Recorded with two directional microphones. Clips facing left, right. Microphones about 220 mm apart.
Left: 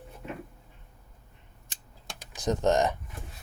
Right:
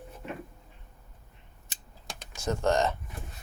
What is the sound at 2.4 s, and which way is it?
Speech, 20° left (ahead or behind).